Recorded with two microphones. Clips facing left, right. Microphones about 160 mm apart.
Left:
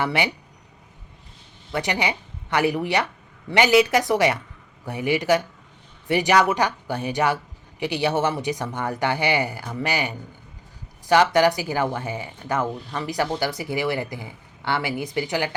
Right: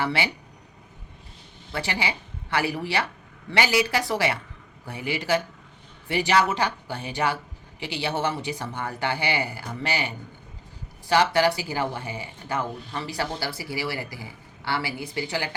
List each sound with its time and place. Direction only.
0.0 s speech: 20° left (ahead or behind)
1.7 s speech: 20° left (ahead or behind)
11.1 s speech: 20° left (ahead or behind)